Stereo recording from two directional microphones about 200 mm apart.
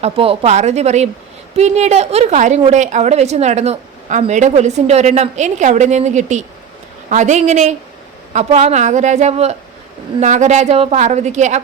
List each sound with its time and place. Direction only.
0.0 s a woman's voice: 30° right (ahead or behind)